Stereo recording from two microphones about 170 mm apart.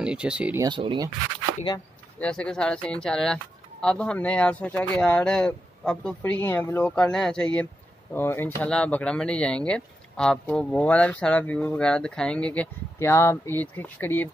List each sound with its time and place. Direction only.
0.0 s speech: 5° right (ahead or behind)
0.6 s speech: 25° right (ahead or behind)
2.1 s speech: 5° left (ahead or behind)